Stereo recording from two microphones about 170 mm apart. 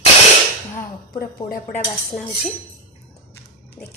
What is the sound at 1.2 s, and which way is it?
Speech, 50° left (ahead or behind).